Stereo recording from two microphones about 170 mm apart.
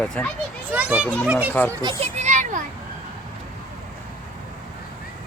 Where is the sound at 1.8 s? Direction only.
25° right (ahead or behind).